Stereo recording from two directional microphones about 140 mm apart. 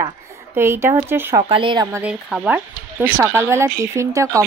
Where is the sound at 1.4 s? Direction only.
40° right (ahead or behind).